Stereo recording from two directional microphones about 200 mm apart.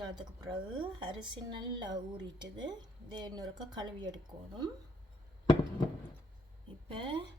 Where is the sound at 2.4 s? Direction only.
20° right (ahead or behind).